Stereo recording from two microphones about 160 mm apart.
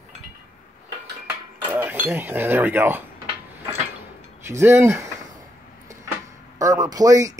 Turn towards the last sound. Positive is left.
turn(degrees=-20)  # may be behind; listen again after turning